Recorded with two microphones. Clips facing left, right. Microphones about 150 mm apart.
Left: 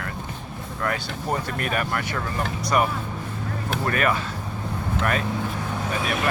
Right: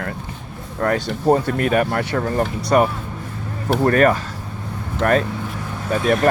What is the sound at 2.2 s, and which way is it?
Speech, 45° right (ahead or behind).